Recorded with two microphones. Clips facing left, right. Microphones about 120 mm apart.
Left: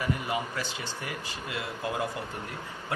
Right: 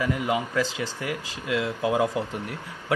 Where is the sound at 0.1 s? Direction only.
90° right.